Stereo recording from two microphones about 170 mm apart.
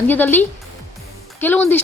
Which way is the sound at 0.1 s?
10° left (ahead or behind).